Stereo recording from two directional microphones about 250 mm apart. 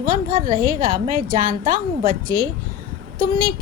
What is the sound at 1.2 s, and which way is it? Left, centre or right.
Speech, right.